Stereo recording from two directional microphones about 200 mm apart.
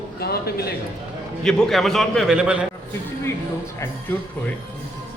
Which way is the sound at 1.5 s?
5° left (ahead or behind).